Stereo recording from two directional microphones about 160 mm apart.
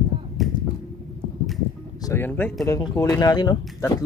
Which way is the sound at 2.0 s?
15° left (ahead or behind).